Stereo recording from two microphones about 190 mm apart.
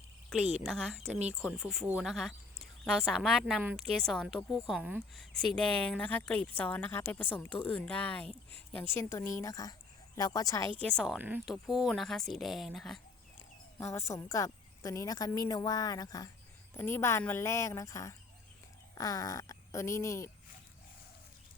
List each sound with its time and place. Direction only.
0.3 s a woman's voice: centre (ahead or behind); by 10.7 s 20° left (ahead or behind)
10.8 s speech: centre (ahead or behind)
13.7 s a woman's voice: 15° left (ahead or behind)